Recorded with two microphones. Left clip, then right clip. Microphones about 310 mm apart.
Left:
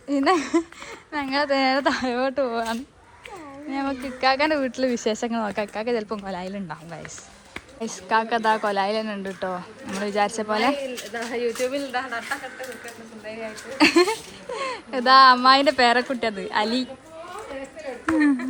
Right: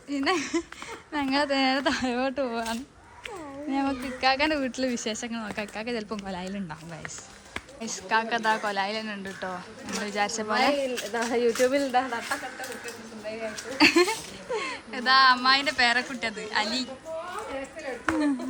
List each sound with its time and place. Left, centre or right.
0.1 s speech: centre
11.1 s speech: right
13.7 s speech: centre